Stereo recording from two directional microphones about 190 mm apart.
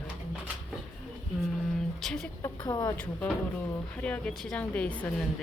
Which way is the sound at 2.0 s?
5° left (ahead or behind).